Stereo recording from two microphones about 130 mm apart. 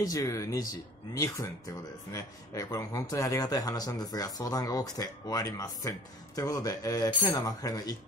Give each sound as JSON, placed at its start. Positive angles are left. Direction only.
{"t": 0.0, "sound": "speech", "side_deg": 25}